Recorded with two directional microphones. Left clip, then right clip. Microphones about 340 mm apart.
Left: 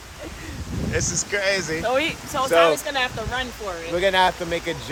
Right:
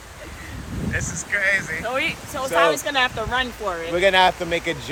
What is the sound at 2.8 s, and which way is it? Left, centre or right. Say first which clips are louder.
Speech: right 3 dB; centre.